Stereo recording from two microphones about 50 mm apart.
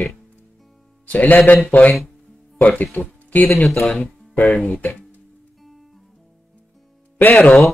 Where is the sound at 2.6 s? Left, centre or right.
Left.